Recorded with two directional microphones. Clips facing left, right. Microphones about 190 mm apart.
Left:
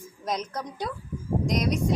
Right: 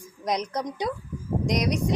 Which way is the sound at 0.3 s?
15° right (ahead or behind).